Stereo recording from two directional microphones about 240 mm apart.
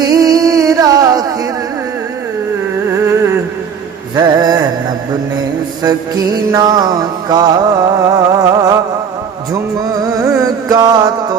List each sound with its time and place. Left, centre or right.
0.0 s music: centre
4.1 s mantra: centre
5.8 s mantra: centre
9.5 s music: centre